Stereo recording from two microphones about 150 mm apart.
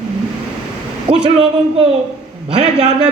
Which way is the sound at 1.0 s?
40° right (ahead or behind).